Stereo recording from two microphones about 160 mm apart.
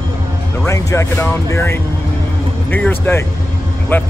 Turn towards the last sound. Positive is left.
turn(degrees=10)  # may be behind; listen again after turning